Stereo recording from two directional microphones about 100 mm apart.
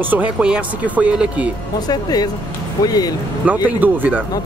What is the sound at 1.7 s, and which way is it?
Speech, 40° left (ahead or behind).